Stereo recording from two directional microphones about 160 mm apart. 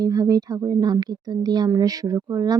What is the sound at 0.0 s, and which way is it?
Speech, 25° right (ahead or behind).